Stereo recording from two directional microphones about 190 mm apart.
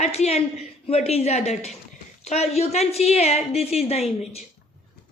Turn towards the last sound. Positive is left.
turn(degrees=35)  # may be behind; listen again after turning